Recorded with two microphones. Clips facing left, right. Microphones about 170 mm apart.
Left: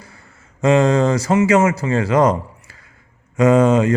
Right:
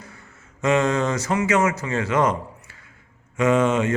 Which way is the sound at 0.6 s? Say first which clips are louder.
Left 6 dB; 35° left (ahead or behind).